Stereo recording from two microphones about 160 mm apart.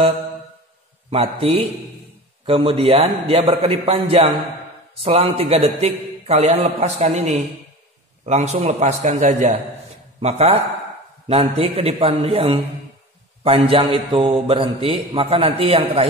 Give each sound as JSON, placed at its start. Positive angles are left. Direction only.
{"t": 1.1, "sound": "a man's voice", "side_deg": -40}